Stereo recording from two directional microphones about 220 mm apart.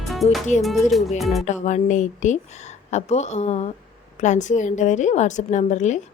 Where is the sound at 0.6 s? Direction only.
Centre (ahead or behind).